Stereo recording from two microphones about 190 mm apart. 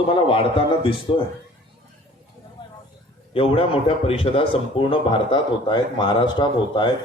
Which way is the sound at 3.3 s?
30° left (ahead or behind).